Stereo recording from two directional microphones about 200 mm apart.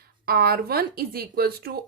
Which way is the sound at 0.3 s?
50° right (ahead or behind).